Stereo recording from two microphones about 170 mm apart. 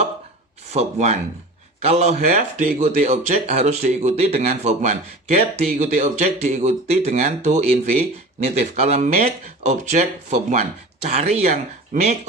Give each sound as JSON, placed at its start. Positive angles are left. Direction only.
{"t": 0.7, "sound": "speech", "side_deg": -40}